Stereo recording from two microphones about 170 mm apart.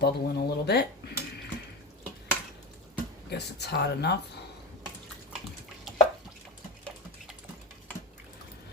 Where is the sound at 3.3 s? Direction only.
75° left (ahead or behind).